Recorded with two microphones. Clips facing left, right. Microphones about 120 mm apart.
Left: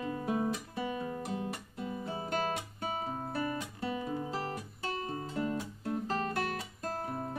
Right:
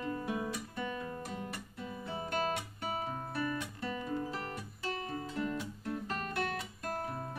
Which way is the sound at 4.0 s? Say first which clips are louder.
Left 1 dB; 20° left (ahead or behind).